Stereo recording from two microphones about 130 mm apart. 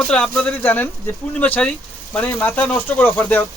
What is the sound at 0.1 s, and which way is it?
A man's voice, 10° left (ahead or behind).